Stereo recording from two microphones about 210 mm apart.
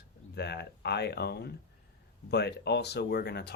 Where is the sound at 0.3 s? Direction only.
50° left (ahead or behind).